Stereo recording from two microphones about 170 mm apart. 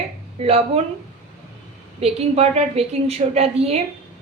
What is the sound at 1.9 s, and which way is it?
A woman's voice, 35° right (ahead or behind).